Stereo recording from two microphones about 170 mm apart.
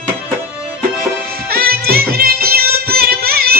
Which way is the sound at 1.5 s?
65° right (ahead or behind).